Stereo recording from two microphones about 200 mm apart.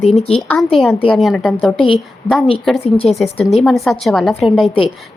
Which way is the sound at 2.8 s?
30° left (ahead or behind).